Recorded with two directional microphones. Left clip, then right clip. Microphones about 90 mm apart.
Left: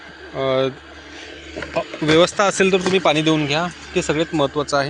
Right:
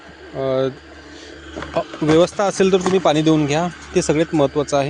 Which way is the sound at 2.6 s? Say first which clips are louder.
Right 4 dB; 80° right.